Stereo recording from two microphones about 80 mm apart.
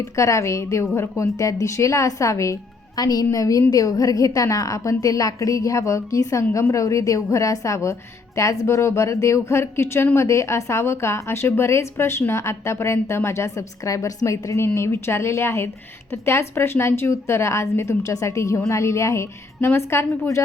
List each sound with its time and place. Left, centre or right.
0.0 s a woman's voice: left